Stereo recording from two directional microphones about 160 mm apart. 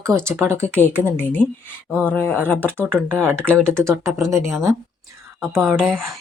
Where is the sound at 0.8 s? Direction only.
10° left (ahead or behind).